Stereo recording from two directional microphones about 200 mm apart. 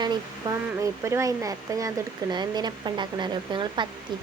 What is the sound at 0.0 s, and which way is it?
Speech, 20° right (ahead or behind).